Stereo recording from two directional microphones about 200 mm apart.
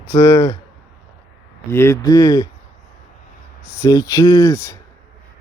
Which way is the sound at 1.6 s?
15° left (ahead or behind).